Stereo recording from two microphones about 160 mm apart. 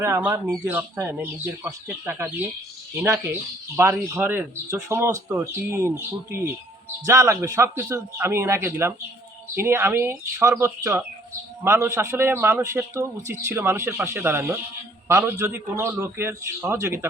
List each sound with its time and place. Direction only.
0.0 s speech: 15° right (ahead or behind)